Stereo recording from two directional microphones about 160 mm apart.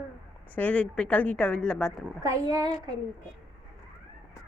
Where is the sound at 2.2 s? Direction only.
25° right (ahead or behind).